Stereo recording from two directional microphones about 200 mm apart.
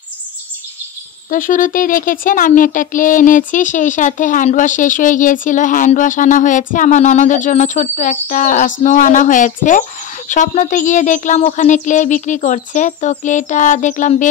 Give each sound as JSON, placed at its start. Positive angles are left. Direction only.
{"t": 1.3, "sound": "speech", "side_deg": 40}